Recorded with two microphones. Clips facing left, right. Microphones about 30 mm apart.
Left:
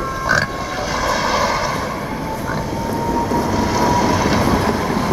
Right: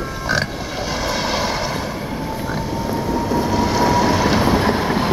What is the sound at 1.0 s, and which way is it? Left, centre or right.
Vehicle, centre.